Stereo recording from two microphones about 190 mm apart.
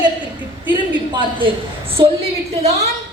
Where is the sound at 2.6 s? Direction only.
35° right (ahead or behind).